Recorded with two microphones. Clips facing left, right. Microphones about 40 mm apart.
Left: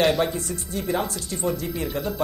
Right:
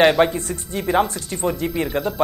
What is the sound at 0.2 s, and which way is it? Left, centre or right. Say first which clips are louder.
Speech: right 7 dB; right.